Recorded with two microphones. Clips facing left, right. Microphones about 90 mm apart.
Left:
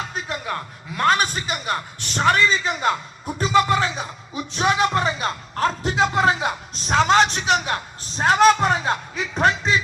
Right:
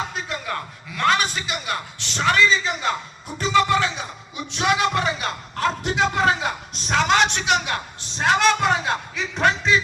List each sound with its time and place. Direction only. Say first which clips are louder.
0.1 s a man's voice: left 1 dB; 30° left (ahead or behind)